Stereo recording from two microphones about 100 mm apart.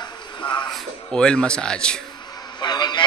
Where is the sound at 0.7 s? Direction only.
5° left (ahead or behind).